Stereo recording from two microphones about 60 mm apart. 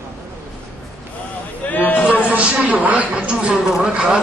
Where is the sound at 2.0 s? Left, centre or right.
Right.